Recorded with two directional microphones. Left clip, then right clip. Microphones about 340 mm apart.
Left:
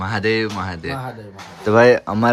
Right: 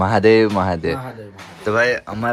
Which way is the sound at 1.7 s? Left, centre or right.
Left.